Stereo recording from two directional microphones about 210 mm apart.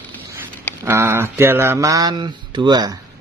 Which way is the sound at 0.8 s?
10° right (ahead or behind).